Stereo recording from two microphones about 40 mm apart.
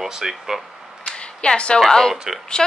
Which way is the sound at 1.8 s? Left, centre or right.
Centre.